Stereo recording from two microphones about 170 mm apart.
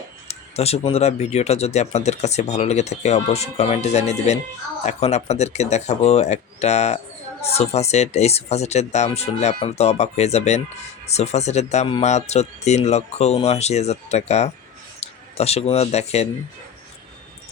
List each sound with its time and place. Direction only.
0.3 s speech: 35° left (ahead or behind)